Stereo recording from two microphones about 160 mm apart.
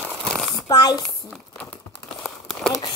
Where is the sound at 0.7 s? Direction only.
25° left (ahead or behind).